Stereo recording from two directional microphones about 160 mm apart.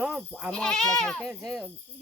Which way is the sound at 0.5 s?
5° left (ahead or behind).